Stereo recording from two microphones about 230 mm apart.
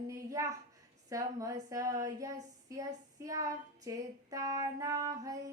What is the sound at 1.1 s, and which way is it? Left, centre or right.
Child singing, centre.